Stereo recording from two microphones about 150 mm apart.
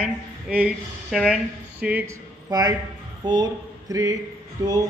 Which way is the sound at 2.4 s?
25° right (ahead or behind).